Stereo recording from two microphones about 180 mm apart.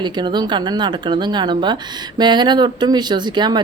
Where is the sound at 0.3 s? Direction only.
25° right (ahead or behind).